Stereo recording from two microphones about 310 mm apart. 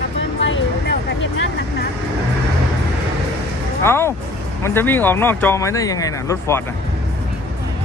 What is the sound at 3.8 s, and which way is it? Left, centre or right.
Speech, centre.